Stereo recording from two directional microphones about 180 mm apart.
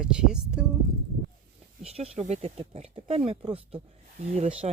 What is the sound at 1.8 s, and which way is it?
Speech, 35° right (ahead or behind).